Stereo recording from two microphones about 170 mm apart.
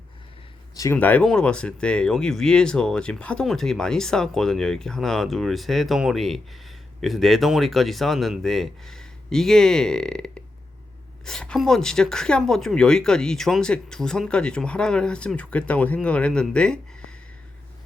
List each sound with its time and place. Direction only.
0.8 s speech: 15° left (ahead or behind)